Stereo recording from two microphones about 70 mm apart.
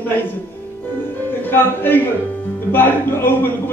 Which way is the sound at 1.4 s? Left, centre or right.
Left.